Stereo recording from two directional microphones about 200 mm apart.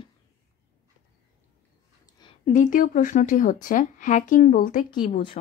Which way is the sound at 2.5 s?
40° left (ahead or behind).